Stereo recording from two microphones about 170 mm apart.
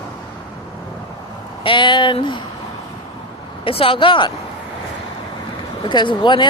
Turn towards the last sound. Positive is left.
turn(degrees=25)  # may be behind; listen again after turning